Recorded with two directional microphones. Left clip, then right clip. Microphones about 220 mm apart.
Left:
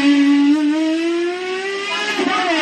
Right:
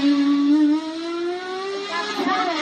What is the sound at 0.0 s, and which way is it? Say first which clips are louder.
Vehicle: left 5 dB; 45° left (ahead or behind).